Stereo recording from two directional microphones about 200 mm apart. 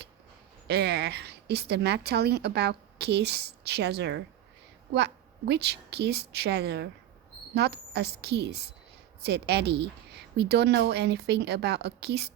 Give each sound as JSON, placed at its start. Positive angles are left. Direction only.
{"t": 0.7, "sound": "a woman's voice", "side_deg": -55}